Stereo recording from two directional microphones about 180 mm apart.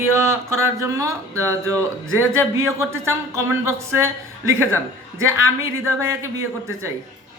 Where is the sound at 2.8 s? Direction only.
15° right (ahead or behind).